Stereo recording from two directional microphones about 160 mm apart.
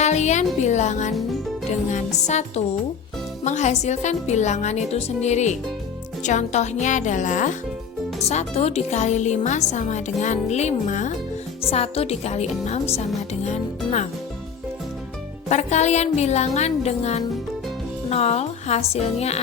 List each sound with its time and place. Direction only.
0.0 s music: 45° left (ahead or behind)
0.6 s speech: 45° left (ahead or behind)
11.6 s speech: 40° left (ahead or behind)
15.4 s speech: 45° left (ahead or behind)